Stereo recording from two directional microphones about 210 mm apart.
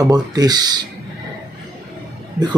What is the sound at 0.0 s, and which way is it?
Speech, 20° right (ahead or behind).